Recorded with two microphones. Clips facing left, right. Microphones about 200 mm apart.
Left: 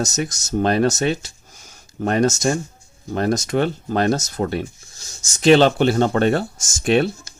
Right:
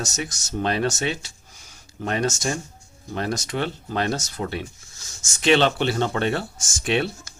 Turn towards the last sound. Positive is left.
turn(degrees=45)  # may be behind; listen again after turning